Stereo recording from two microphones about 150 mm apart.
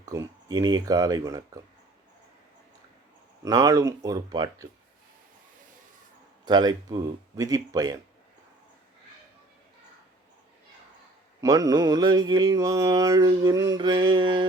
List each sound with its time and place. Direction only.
0.0 s mantra: 20° right (ahead or behind)
3.4 s mantra: 20° right (ahead or behind)
6.4 s mantra: 25° right (ahead or behind)
11.3 s mantra: 25° right (ahead or behind)